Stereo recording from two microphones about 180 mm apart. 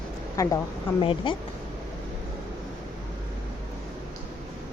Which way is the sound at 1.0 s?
30° left (ahead or behind).